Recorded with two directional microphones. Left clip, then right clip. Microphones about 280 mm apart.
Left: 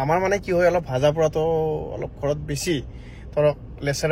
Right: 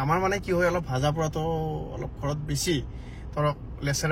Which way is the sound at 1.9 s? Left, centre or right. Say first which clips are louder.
Left 8 dB; centre.